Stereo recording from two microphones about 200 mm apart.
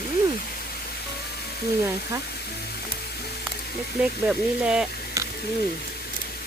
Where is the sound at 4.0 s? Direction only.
5° right (ahead or behind).